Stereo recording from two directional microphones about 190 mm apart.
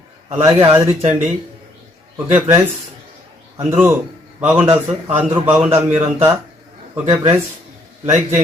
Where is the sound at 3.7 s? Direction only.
10° right (ahead or behind).